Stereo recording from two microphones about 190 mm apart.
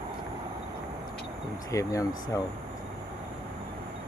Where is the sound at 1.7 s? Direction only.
15° left (ahead or behind).